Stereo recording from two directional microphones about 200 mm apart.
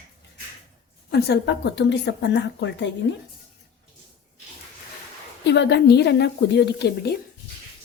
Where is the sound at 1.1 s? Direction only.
55° left (ahead or behind).